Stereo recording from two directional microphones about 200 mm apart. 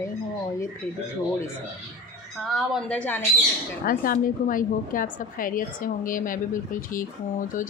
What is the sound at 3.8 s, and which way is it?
A woman's voice, 45° left (ahead or behind).